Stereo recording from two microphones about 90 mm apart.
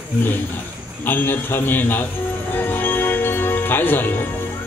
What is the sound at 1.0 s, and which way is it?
A man's voice, 20° left (ahead or behind).